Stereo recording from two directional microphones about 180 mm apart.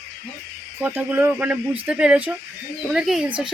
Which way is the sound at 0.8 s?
10° right (ahead or behind).